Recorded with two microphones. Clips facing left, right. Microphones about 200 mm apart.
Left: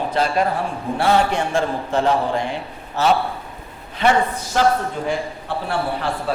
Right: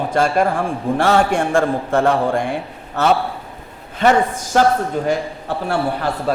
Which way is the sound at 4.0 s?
45° right (ahead or behind).